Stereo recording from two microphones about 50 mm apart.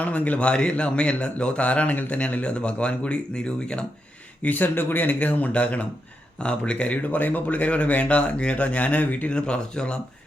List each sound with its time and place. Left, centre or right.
0.0 s speech: left
4.4 s speech: left
9.3 s speech: centre